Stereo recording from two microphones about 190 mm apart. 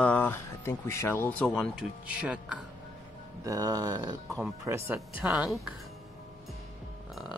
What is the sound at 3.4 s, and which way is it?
Speech, 20° right (ahead or behind).